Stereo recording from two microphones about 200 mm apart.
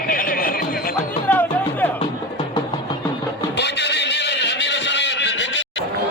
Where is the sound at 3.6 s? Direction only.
60° left (ahead or behind).